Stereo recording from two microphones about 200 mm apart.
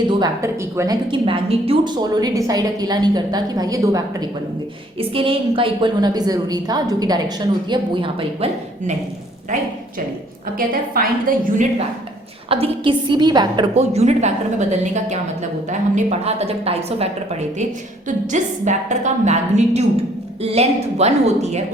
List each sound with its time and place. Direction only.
0.1 s a woman's voice: 15° right (ahead or behind)
1.1 s a woman's voice: 25° right (ahead or behind)
4.9 s a woman's voice: 25° right (ahead or behind)
10.6 s a woman's voice: 45° right (ahead or behind)
12.5 s a woman's voice: 30° right (ahead or behind)
13.7 s a woman's voice: 35° right (ahead or behind)
18.3 s a woman's voice: 35° right (ahead or behind)